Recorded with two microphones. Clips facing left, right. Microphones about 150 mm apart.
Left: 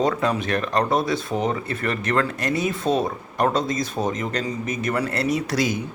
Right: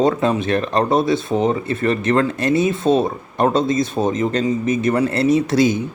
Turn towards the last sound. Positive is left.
turn(degrees=-25)  # may be behind; listen again after turning